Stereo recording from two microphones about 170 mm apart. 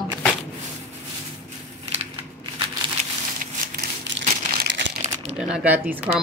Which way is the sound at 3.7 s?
60° right (ahead or behind).